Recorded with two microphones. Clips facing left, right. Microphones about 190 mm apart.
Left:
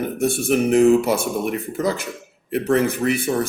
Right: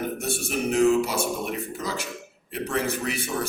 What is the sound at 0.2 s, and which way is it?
A man's voice, 55° left (ahead or behind).